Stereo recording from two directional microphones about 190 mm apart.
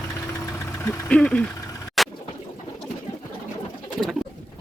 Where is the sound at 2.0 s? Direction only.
Centre (ahead or behind).